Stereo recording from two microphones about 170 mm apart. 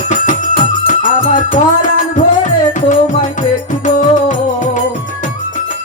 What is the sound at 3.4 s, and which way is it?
Music, 45° left (ahead or behind).